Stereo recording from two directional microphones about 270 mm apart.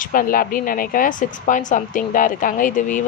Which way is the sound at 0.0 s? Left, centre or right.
Left.